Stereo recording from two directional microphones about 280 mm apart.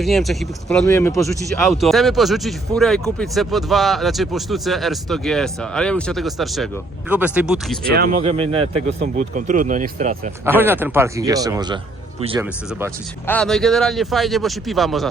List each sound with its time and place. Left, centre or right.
0.0 s speech: centre
8.2 s speech: centre
10.4 s speech: centre
13.2 s speech: centre